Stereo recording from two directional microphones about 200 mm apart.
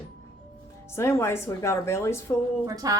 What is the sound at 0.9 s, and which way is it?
Speech, 15° left (ahead or behind).